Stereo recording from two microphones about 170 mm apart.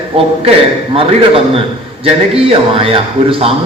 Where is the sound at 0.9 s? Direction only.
35° right (ahead or behind).